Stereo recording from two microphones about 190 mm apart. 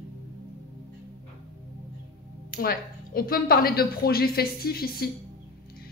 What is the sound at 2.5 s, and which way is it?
A woman's voice, 50° left (ahead or behind).